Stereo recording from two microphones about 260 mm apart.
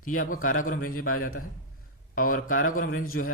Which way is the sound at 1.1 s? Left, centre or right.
Left.